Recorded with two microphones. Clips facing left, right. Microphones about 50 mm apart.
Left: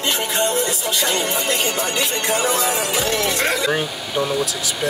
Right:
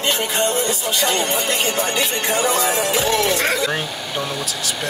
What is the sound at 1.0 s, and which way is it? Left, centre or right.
Speech, centre.